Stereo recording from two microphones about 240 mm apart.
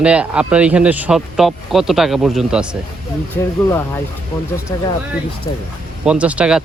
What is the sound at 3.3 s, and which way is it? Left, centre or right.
Speech, centre.